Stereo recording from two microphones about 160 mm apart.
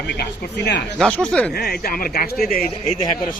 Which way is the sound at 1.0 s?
5° left (ahead or behind).